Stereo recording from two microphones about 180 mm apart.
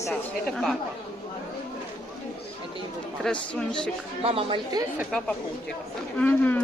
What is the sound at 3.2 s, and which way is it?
Speech, 5° left (ahead or behind).